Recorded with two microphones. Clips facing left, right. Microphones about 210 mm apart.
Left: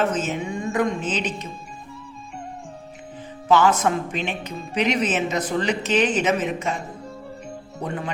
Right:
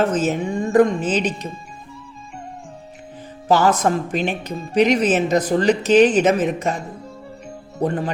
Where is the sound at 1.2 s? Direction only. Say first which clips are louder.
Right 5 dB; centre (ahead or behind).